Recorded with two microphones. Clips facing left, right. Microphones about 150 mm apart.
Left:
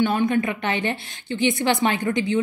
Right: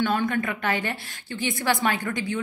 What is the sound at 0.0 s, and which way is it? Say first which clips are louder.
A woman's voice: left 4 dB; 20° left (ahead or behind).